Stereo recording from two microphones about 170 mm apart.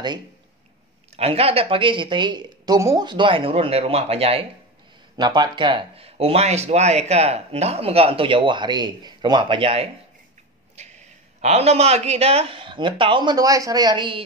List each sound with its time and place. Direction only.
1.1 s speech: 35° right (ahead or behind)
5.1 s speech: 25° right (ahead or behind)